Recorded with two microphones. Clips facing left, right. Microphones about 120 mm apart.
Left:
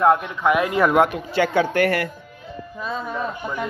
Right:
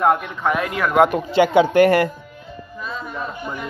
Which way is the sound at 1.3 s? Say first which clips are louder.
Right 5 dB; 20° right (ahead or behind).